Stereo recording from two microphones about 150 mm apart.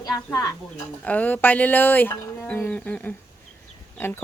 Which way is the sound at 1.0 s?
10° left (ahead or behind).